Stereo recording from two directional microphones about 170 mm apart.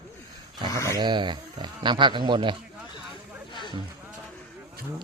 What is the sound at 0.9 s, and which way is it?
Speech, 25° right (ahead or behind).